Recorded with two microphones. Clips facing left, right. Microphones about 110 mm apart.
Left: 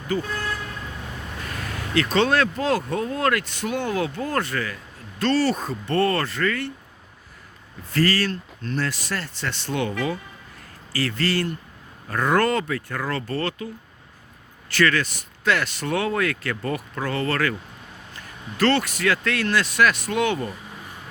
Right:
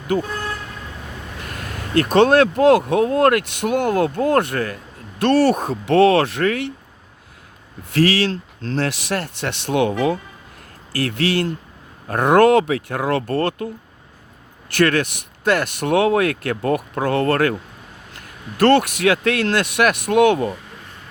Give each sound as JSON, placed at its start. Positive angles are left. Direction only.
{"t": 0.1, "sound": "speech", "side_deg": -55}
{"t": 1.7, "sound": "speech", "side_deg": -55}
{"t": 7.9, "sound": "speech", "side_deg": -70}
{"t": 10.9, "sound": "speech", "side_deg": -60}
{"t": 14.7, "sound": "speech", "side_deg": -55}